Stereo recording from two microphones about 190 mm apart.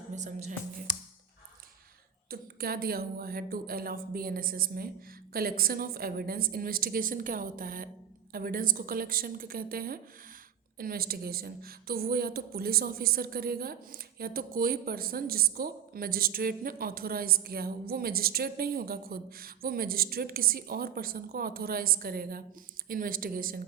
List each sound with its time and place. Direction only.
0.1 s speech: 40° right (ahead or behind)
2.3 s a woman's voice: 50° right (ahead or behind)